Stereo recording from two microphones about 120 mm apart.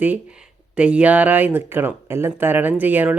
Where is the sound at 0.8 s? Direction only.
10° right (ahead or behind).